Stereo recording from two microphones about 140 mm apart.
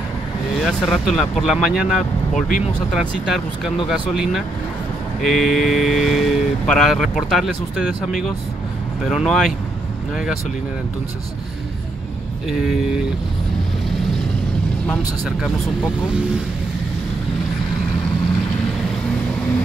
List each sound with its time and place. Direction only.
0.6 s speech: centre (ahead or behind)
2.3 s speech: 75° left (ahead or behind)
2.9 s speech: centre (ahead or behind)
12.4 s speech: centre (ahead or behind)
15.2 s speech: 5° right (ahead or behind)